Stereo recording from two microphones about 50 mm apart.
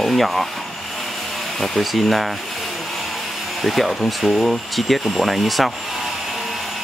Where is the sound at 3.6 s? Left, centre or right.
Centre.